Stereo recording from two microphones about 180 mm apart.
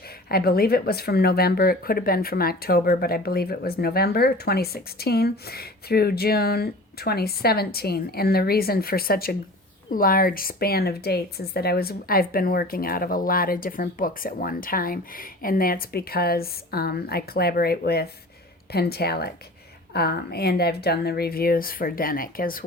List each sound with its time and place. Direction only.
0.3 s speech: 60° left (ahead or behind)